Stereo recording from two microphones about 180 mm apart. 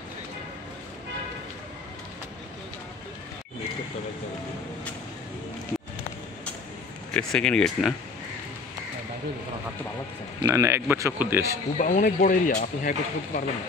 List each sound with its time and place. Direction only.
7.2 s speech: 5° left (ahead or behind)
10.4 s speech: 15° right (ahead or behind)
11.8 s speech: 45° left (ahead or behind)